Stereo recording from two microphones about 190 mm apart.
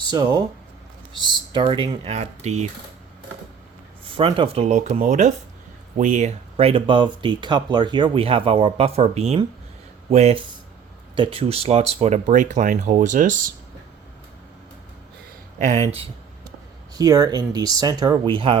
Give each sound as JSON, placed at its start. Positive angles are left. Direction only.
{"t": 0.1, "sound": "speech", "side_deg": -20}
{"t": 4.1, "sound": "speech", "side_deg": -25}
{"t": 15.5, "sound": "speech", "side_deg": -40}
{"t": 16.9, "sound": "speech", "side_deg": -20}